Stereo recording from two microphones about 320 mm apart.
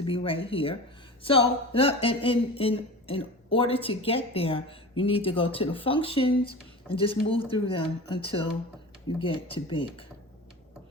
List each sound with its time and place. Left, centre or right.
0.0 s speech: centre